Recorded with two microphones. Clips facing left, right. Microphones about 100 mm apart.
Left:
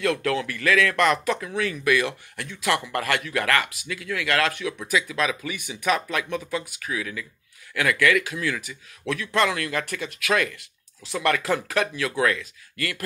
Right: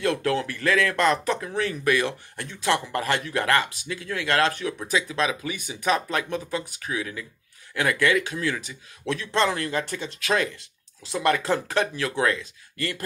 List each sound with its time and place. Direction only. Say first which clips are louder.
0.0 s speech: even; 30° right (ahead or behind)